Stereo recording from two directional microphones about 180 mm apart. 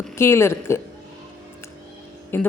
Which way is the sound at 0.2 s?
15° left (ahead or behind).